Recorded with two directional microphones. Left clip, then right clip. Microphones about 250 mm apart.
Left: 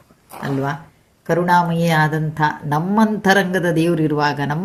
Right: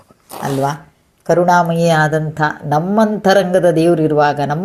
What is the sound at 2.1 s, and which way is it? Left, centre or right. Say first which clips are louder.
Speech: right 3 dB; centre.